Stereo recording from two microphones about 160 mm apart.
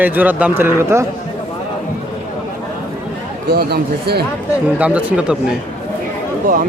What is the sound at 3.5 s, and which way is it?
Speech, 85° right.